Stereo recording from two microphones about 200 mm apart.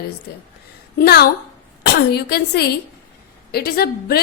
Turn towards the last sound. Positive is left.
turn(degrees=50)  # may be behind; listen again after turning